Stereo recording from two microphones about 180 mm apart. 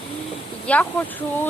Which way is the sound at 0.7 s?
5° left (ahead or behind).